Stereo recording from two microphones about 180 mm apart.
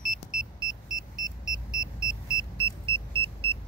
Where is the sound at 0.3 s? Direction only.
55° right (ahead or behind).